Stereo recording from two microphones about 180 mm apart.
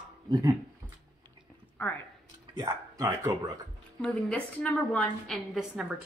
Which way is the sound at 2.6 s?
20° right (ahead or behind).